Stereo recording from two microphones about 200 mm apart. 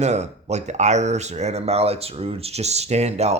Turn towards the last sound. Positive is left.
turn(degrees=-30)  # may be behind; listen again after turning